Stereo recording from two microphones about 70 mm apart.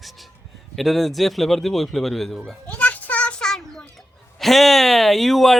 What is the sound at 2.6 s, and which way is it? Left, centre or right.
Children playing, left.